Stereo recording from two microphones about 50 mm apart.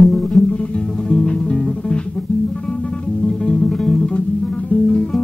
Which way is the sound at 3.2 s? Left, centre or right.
Centre.